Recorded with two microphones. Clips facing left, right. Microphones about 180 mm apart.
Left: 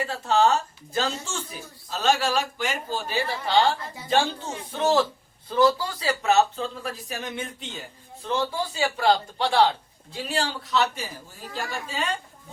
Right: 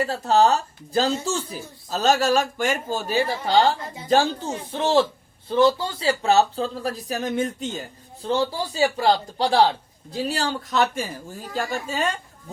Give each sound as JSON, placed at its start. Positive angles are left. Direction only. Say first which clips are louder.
{"t": 0.0, "sound": "a woman's voice", "louder": "right 3 dB", "side_deg": -40}